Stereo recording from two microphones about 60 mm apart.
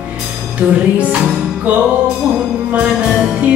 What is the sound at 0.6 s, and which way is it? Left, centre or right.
Music, right.